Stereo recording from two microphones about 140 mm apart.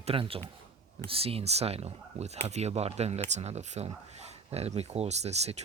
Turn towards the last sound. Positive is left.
turn(degrees=-50)  # may be behind; listen again after turning